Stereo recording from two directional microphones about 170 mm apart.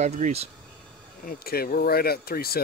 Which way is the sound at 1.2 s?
60° left (ahead or behind).